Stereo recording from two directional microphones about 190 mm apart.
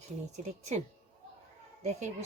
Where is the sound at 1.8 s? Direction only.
35° right (ahead or behind).